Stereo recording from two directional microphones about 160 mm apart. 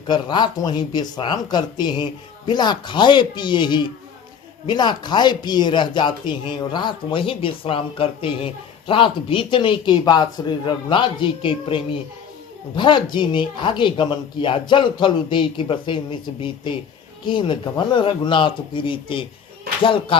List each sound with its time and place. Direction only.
0.1 s speech: 30° left (ahead or behind)
17.2 s speech: 30° left (ahead or behind)